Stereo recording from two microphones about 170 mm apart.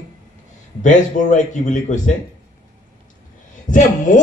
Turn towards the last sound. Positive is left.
turn(degrees=50)  # may be behind; listen again after turning